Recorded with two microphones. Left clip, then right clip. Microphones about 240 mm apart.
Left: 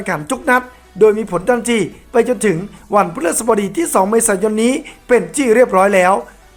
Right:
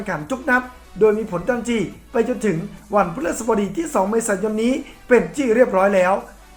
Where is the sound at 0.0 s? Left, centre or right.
Left.